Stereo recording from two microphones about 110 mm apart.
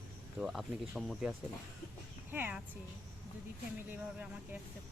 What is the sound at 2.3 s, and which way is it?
Speech, 20° right (ahead or behind).